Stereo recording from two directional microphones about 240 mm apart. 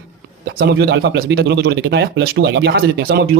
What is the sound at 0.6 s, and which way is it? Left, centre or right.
Speech, right.